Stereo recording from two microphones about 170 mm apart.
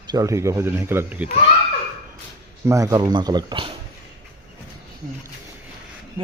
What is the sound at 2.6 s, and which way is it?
Speech, 20° right (ahead or behind).